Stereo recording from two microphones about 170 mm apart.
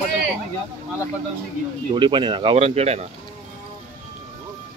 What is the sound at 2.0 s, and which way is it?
Speech, 30° right (ahead or behind).